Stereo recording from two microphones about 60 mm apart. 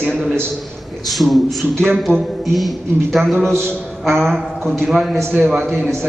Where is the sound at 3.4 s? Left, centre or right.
Right.